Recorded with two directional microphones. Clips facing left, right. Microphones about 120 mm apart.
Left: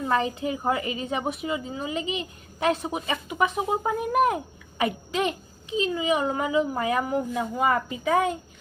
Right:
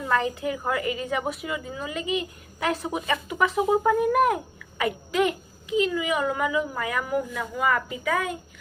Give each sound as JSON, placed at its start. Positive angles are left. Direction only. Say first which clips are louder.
{"t": 0.1, "sound": "a woman's voice", "louder": "right 1 dB", "side_deg": 20}